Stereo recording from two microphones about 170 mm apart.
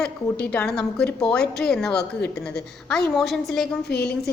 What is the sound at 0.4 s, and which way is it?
A woman's voice, 5° left (ahead or behind).